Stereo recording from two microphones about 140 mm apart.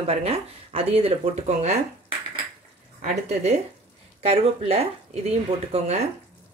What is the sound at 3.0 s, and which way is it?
Speech, 55° right (ahead or behind).